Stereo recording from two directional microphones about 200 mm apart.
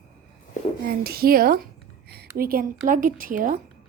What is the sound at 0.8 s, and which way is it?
A woman's voice, 50° right (ahead or behind).